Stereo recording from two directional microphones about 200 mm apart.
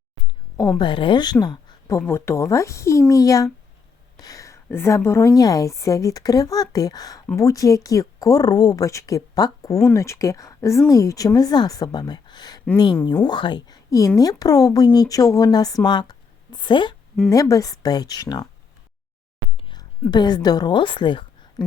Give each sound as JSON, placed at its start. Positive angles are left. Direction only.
{"t": 0.8, "sound": "a woman's voice", "side_deg": 25}
{"t": 20.1, "sound": "a woman's voice", "side_deg": 20}